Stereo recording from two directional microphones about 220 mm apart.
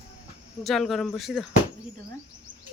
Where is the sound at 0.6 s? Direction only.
Centre (ahead or behind).